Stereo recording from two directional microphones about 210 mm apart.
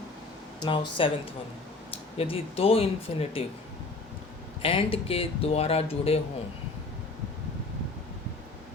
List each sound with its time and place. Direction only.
0.6 s speech: 20° left (ahead or behind)
4.6 s speech: 25° left (ahead or behind)